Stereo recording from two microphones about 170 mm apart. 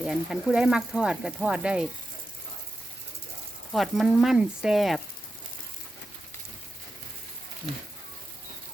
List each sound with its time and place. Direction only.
0.0 s speech: centre (ahead or behind)
3.7 s speech: centre (ahead or behind)